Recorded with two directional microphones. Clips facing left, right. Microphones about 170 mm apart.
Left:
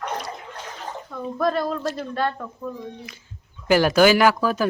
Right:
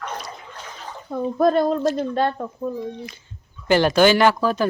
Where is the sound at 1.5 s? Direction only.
45° right (ahead or behind).